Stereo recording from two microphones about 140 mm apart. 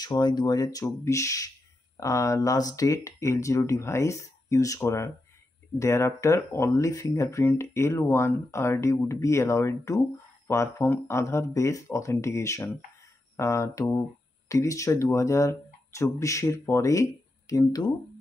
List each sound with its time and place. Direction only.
0.0 s speech: 30° left (ahead or behind)